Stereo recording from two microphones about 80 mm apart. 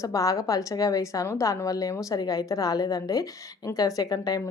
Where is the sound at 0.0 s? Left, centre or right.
Left.